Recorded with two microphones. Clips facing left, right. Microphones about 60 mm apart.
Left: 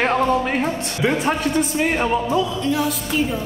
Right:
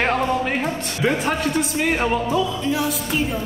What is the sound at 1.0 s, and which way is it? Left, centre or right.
Speech, centre.